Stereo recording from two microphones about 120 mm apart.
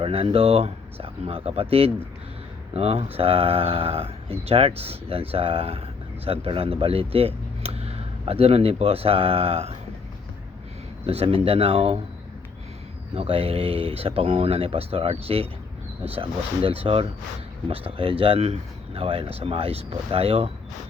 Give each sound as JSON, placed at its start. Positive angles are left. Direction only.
{"t": 0.0, "sound": "speech", "side_deg": -50}
{"t": 11.0, "sound": "speech", "side_deg": -55}
{"t": 13.1, "sound": "speech", "side_deg": -55}